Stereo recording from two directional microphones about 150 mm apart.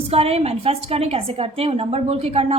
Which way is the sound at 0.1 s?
40° right (ahead or behind).